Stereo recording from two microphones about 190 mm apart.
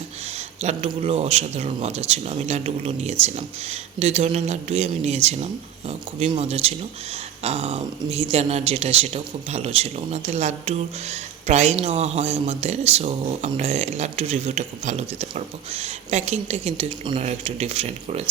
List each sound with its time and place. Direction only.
0.6 s speech: 35° right (ahead or behind)